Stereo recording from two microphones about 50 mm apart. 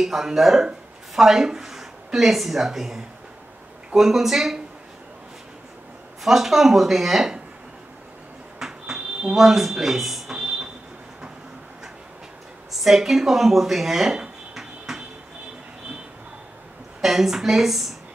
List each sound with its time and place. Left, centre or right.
0.0 s a woman's voice: centre
6.2 s speech: centre
8.5 s a sound: centre
10.3 s a sound: centre
12.8 s speech: centre
17.0 s a woman's voice: centre